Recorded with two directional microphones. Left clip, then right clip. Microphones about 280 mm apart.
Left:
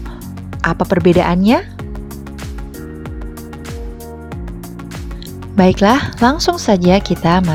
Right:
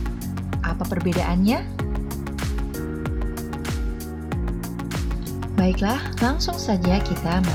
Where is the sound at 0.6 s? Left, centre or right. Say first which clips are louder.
Left 14 dB; left.